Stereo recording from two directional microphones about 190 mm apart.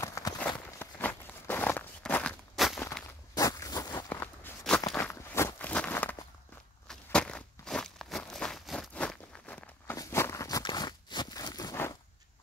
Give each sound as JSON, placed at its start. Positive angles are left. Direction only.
{"t": 0.0, "sound": "walk", "side_deg": 15}
{"t": 2.8, "sound": "walk", "side_deg": 15}
{"t": 9.9, "sound": "a sound", "side_deg": 15}